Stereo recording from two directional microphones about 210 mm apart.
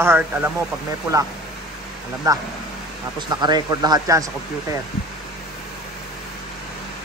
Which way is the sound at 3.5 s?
20° right (ahead or behind).